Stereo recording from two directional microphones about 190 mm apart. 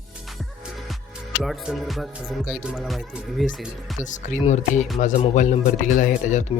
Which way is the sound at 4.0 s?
40° left (ahead or behind).